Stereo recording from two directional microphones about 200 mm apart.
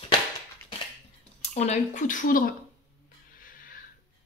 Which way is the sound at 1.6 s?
35° left (ahead or behind).